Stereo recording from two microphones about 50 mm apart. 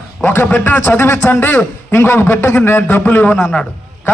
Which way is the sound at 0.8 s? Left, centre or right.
Left.